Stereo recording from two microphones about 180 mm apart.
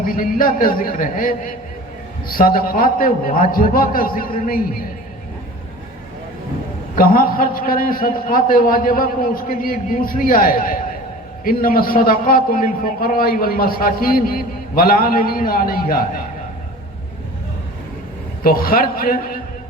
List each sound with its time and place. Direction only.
0.0 s a man's voice: 50° left (ahead or behind)
6.9 s a man's voice: 50° left (ahead or behind)
18.4 s a man's voice: 55° left (ahead or behind)